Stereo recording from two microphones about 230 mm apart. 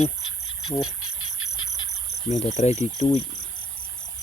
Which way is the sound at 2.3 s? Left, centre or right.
Left.